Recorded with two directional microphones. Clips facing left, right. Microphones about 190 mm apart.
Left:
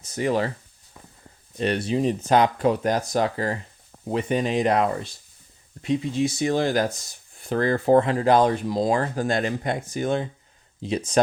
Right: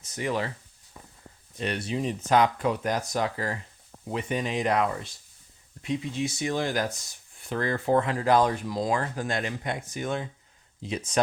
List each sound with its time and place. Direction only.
0.0 s speech: 35° left (ahead or behind)
1.5 s speech: 35° left (ahead or behind)